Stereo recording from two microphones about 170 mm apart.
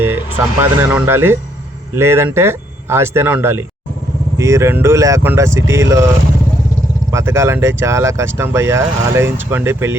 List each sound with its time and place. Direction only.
0.6 s speech: 15° right (ahead or behind)
7.1 s speech: 15° right (ahead or behind)